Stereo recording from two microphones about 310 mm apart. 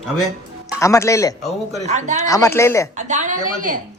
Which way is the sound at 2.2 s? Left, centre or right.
Centre.